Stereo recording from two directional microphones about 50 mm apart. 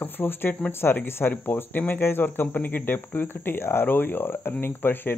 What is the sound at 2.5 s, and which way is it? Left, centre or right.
Speech, left.